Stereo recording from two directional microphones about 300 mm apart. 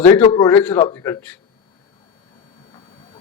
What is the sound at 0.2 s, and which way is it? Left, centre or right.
A man's voice, centre.